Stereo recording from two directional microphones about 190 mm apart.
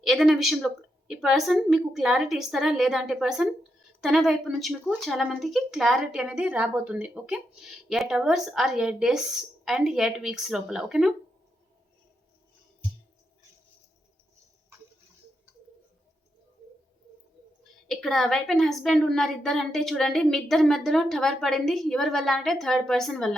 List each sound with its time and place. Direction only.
0.0 s speech: centre (ahead or behind)
17.8 s speech: centre (ahead or behind)